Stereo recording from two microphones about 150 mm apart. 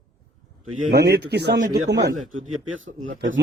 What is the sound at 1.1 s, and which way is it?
Speech, 90° right.